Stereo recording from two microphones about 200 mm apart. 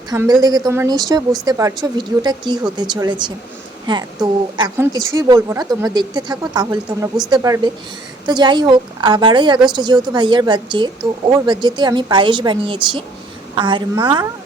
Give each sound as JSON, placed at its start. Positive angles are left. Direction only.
{"t": 0.1, "sound": "a woman's voice", "side_deg": -20}